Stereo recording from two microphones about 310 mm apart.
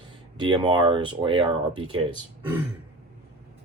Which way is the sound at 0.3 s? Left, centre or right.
Centre.